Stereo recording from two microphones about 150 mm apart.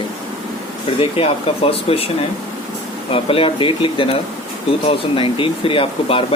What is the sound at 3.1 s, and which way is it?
Speech, 35° left (ahead or behind).